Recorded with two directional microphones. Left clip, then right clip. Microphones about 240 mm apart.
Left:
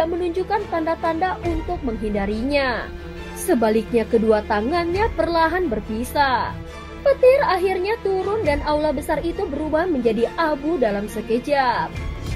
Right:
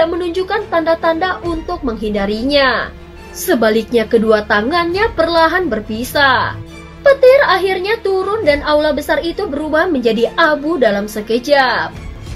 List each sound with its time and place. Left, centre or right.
0.0 s a woman's voice: left